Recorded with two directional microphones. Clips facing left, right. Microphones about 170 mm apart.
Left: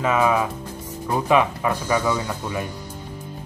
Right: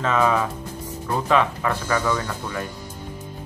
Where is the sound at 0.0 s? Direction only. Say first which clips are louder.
Left 1 dB; 10° left (ahead or behind).